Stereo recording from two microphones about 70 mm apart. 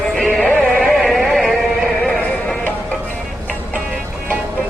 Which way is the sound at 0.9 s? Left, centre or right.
Centre.